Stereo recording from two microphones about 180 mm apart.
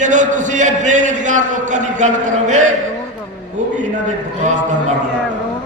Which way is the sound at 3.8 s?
40° right (ahead or behind).